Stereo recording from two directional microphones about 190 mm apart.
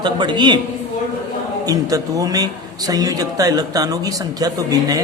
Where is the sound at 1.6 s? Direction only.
20° right (ahead or behind).